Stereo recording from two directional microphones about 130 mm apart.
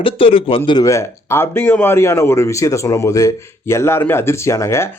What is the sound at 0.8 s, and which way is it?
Speech, 25° left (ahead or behind).